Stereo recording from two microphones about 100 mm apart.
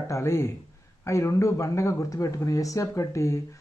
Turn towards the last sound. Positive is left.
turn(degrees=30)  # may be behind; listen again after turning